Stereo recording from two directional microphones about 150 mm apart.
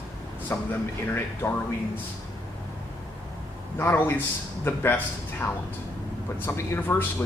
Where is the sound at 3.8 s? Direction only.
15° left (ahead or behind).